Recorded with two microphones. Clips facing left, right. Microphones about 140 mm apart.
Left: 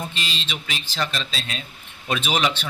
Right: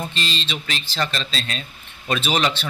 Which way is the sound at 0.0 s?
10° left (ahead or behind).